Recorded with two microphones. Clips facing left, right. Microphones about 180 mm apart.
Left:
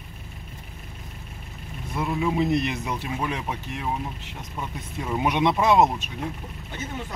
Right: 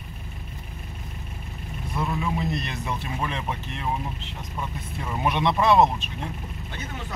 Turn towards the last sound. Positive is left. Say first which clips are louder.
# even
turn(degrees=20)  # may be behind; listen again after turning